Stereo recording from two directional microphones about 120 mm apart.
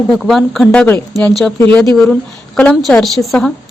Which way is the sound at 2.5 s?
5° left (ahead or behind).